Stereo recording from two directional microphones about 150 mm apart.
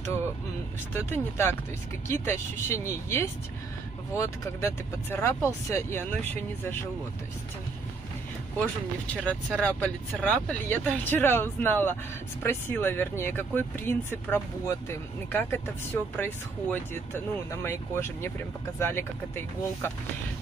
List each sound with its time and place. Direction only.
1.1 s speech: 15° left (ahead or behind)
9.1 s speech: 10° left (ahead or behind)